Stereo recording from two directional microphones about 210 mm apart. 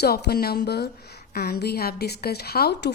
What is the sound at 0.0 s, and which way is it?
A woman's voice, 50° left (ahead or behind).